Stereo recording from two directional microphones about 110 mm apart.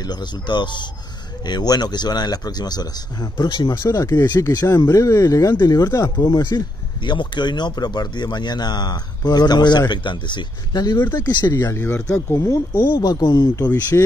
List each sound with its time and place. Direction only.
0.0 s speech: 40° left (ahead or behind)
11.7 s speech: 20° left (ahead or behind)
12.9 s speech: 40° left (ahead or behind)
13.9 s speech: 25° left (ahead or behind)